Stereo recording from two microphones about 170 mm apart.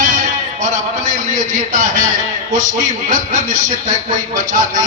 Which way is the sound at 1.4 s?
50° right (ahead or behind).